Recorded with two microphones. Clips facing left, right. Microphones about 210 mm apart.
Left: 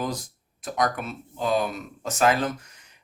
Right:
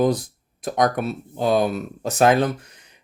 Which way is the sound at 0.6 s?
40° right (ahead or behind).